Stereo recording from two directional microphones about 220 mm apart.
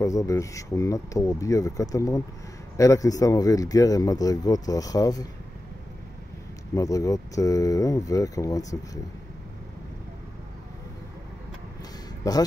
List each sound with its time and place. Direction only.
0.0 s speech: 15° left (ahead or behind)
6.7 s speech: 15° left (ahead or behind)
12.2 s speech: 15° left (ahead or behind)